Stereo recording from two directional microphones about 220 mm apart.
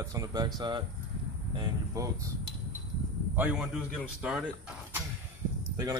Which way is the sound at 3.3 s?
5° right (ahead or behind).